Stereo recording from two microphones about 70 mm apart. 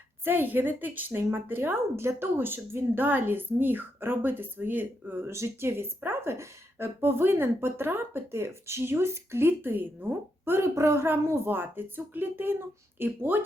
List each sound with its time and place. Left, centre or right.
0.3 s speech: right
5.3 s speech: right